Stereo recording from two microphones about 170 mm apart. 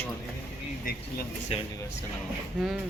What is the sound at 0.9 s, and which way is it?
Speech, 55° left (ahead or behind).